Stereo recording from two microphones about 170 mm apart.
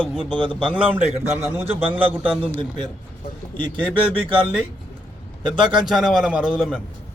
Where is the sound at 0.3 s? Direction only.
30° right (ahead or behind).